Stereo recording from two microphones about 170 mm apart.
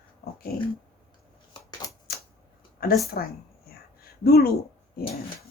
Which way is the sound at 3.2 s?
65° left (ahead or behind).